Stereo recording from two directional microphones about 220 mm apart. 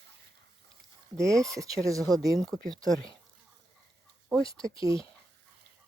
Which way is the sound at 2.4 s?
Centre (ahead or behind).